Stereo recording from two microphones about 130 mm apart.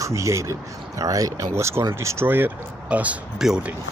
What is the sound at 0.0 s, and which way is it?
Speech, 25° right (ahead or behind).